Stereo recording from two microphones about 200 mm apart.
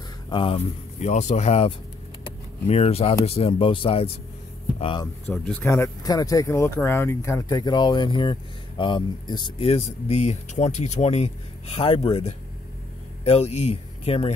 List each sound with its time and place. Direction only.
0.3 s speech: 25° left (ahead or behind)
2.2 s a sound: 30° left (ahead or behind)
3.3 s speech: 30° left (ahead or behind)
5.3 s speech: 5° left (ahead or behind)
5.7 s speech: 15° left (ahead or behind)